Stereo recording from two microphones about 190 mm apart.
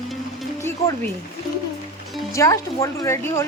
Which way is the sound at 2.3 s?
15° left (ahead or behind).